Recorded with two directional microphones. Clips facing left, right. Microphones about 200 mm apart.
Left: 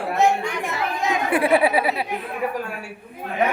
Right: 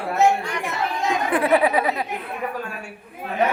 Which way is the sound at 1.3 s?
10° left (ahead or behind).